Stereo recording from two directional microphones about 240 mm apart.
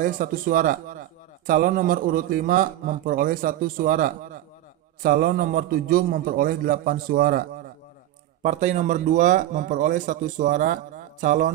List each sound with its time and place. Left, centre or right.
0.0 s speech: right